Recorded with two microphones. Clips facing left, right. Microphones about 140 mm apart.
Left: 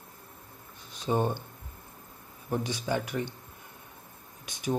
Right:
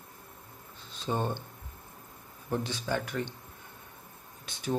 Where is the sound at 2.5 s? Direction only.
15° left (ahead or behind).